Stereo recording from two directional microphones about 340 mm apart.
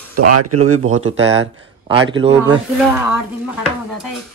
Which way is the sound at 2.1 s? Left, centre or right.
Centre.